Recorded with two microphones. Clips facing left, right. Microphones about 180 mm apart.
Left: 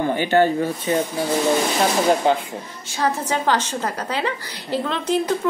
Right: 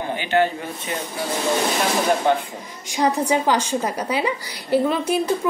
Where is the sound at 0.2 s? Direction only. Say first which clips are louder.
Left 2 dB; 40° left (ahead or behind).